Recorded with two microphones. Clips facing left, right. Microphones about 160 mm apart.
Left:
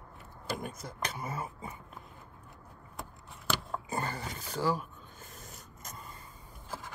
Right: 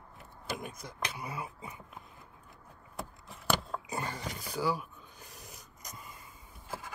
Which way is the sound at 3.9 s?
Centre (ahead or behind).